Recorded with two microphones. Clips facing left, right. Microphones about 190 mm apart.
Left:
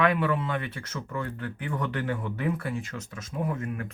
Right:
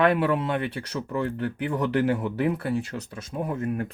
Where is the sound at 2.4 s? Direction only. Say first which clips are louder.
Right 5 dB; 35° right (ahead or behind).